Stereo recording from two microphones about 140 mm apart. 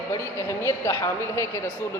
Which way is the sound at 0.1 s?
20° left (ahead or behind).